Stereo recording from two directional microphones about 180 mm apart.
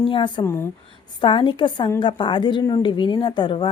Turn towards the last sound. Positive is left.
turn(degrees=25)  # may be behind; listen again after turning